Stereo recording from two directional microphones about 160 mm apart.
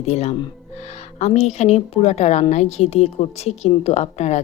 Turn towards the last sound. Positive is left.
turn(degrees=45)  # may be behind; listen again after turning